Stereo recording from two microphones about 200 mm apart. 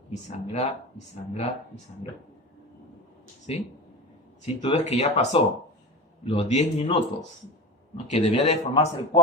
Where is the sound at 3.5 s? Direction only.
30° left (ahead or behind).